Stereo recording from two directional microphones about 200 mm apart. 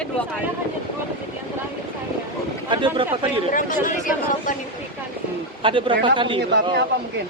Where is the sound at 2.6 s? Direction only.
25° right (ahead or behind).